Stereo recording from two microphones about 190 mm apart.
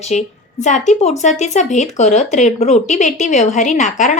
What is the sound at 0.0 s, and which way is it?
A woman's voice, 40° left (ahead or behind).